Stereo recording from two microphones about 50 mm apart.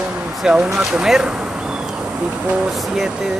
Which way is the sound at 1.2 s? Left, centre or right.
Right.